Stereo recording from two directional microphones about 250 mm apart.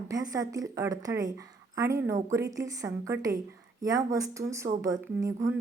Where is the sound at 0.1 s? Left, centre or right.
Centre.